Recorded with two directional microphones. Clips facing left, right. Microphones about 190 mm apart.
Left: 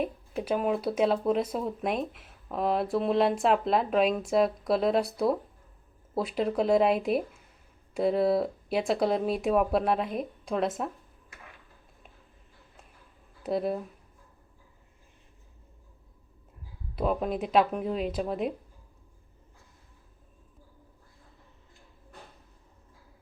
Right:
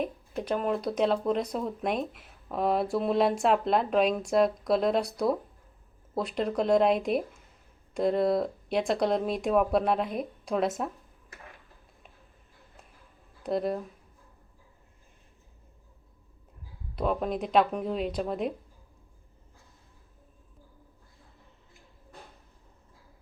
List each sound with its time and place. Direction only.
0.0 s speech: 5° left (ahead or behind)
13.4 s speech: 5° left (ahead or behind)
16.9 s speech: 5° left (ahead or behind)